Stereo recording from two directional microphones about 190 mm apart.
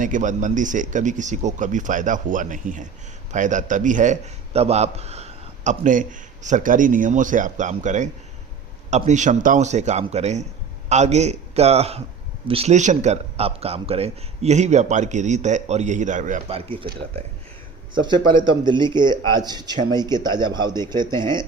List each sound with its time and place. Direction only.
0.0 s a man's voice: 40° right (ahead or behind)
16.6 s a man's voice: 30° right (ahead or behind)